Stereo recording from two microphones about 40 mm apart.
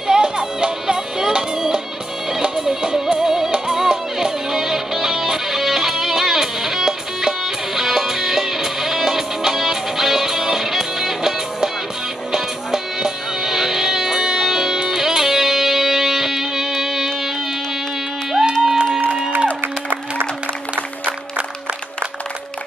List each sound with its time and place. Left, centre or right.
0.0 s music: centre
18.5 s music: centre
19.3 s music: right
20.7 s music: right